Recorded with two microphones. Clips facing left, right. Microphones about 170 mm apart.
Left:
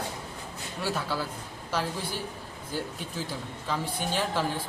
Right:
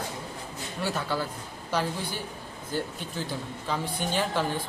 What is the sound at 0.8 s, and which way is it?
A man's voice, 5° left (ahead or behind).